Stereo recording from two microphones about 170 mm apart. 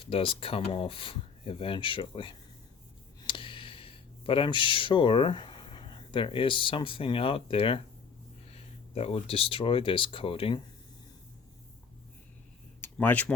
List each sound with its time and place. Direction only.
0.0 s speech: 30° left (ahead or behind)
12.8 s speech: 10° left (ahead or behind)